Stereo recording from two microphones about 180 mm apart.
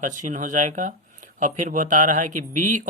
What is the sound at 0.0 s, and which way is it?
Speech, 45° right (ahead or behind).